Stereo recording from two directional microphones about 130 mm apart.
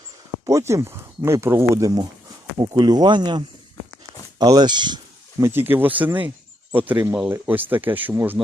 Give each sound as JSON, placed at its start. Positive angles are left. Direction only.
{"t": 0.4, "sound": "speech", "side_deg": -25}
{"t": 5.4, "sound": "speech", "side_deg": -15}